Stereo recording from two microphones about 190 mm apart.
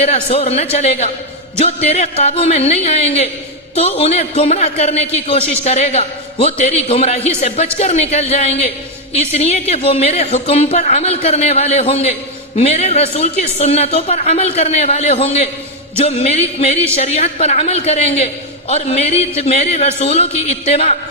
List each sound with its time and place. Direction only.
0.0 s a woman's voice: 35° left (ahead or behind)